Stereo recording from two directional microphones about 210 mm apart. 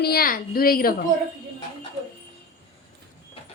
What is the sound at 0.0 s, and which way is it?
Speech, 45° left (ahead or behind).